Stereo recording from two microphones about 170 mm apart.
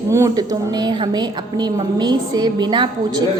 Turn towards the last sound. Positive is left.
turn(degrees=-25)  # may be behind; listen again after turning